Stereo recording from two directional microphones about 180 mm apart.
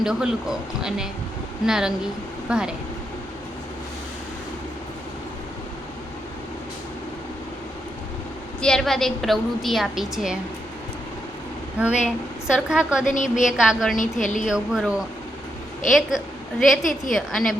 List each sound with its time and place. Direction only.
0.0 s a woman's voice: 5° right (ahead or behind)
8.6 s a woman's voice: centre (ahead or behind)
11.8 s a woman's voice: 5° right (ahead or behind)
13.1 s a woman's voice: 45° left (ahead or behind)
13.4 s a woman's voice: 5° right (ahead or behind)
13.9 s a woman's voice: 45° left (ahead or behind)
14.4 s a woman's voice: 5° right (ahead or behind)